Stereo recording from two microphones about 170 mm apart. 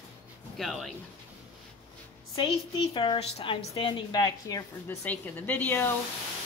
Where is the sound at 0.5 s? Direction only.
Centre (ahead or behind).